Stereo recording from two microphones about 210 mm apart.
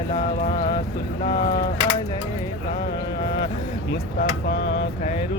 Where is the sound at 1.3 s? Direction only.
45° left (ahead or behind).